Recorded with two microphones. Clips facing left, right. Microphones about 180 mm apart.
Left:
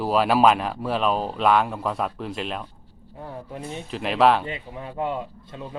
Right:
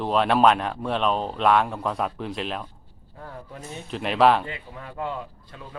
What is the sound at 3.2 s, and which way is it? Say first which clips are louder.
Speech: left 4 dB; 20° left (ahead or behind).